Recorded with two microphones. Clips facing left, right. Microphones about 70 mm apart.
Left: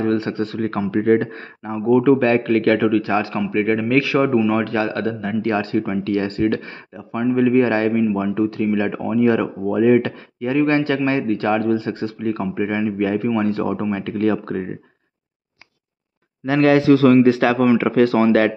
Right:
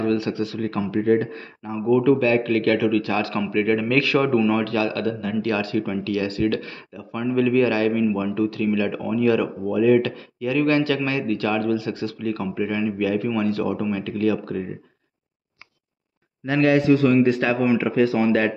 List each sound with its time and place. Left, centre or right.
0.0 s speech: left
2.9 s speech: left
16.7 s speech: left